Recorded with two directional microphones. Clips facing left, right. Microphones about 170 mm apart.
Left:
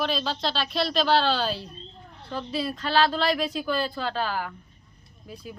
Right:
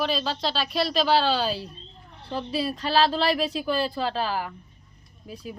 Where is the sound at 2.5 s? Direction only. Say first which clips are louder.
Right 1 dB; 35° right (ahead or behind).